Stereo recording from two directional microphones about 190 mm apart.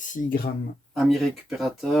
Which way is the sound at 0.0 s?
45° left (ahead or behind).